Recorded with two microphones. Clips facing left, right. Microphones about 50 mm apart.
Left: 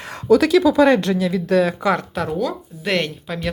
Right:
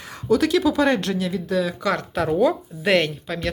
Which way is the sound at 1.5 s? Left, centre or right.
Left.